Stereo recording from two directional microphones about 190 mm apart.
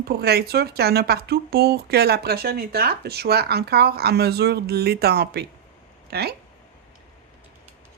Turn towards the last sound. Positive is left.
turn(degrees=-55)  # may be behind; listen again after turning